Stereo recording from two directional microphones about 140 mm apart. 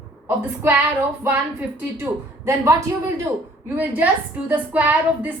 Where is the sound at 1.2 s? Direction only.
15° right (ahead or behind).